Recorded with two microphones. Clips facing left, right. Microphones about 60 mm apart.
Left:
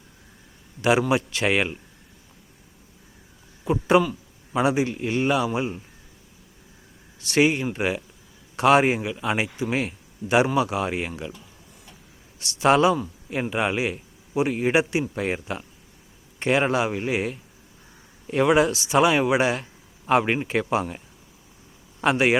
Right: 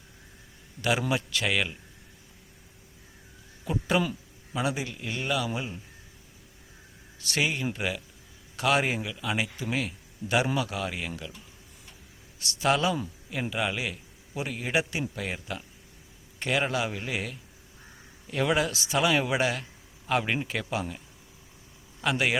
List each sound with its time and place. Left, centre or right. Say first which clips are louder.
0.8 s a man's voice: left 7 dB; left
3.6 s a man's voice: left 8 dB; left
7.3 s a man's voice: left 8 dB; left
12.5 s a man's voice: left 7 dB; left
22.0 s a man's voice: left 7 dB; left